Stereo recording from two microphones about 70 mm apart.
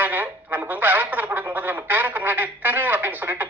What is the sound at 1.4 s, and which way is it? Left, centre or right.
Telephone, right.